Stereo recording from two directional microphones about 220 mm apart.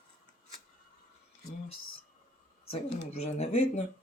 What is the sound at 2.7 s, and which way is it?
Speech, 30° left (ahead or behind).